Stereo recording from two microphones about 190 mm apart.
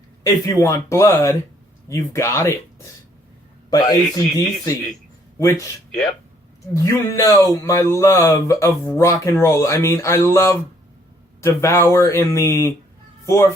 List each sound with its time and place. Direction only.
0.4 s speech: 15° left (ahead or behind)
3.7 s speech: 20° left (ahead or behind)
6.7 s speech: 15° left (ahead or behind)